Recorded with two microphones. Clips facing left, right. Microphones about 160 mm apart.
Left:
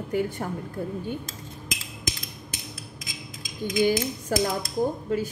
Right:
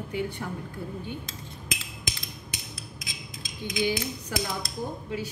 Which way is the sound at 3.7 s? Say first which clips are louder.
Left 5 dB; 45° left (ahead or behind).